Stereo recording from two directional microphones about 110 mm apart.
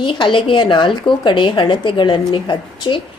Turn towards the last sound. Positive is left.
turn(degrees=45)  # may be behind; listen again after turning